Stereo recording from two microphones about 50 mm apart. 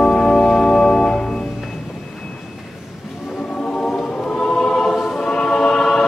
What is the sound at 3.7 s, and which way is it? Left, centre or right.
Music, centre.